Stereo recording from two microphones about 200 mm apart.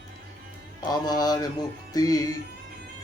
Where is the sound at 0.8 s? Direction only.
20° left (ahead or behind).